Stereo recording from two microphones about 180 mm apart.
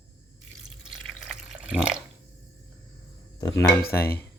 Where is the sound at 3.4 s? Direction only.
20° left (ahead or behind).